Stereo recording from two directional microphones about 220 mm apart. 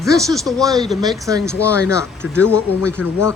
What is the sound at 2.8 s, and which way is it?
Speech, 5° left (ahead or behind).